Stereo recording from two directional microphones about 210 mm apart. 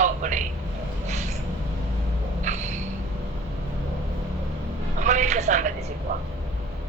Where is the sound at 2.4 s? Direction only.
35° right (ahead or behind).